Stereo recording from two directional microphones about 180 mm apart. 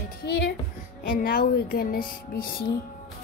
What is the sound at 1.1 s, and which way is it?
Music, 55° left (ahead or behind).